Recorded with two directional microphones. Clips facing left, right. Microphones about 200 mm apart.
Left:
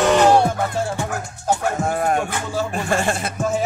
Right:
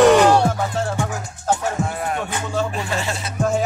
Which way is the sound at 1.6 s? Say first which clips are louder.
Left 3 dB; 45° left (ahead or behind).